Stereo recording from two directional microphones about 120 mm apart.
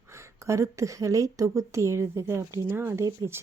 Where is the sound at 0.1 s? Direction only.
25° right (ahead or behind).